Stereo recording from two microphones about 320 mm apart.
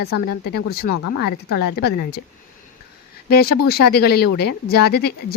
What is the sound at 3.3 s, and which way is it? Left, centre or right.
Speech, left.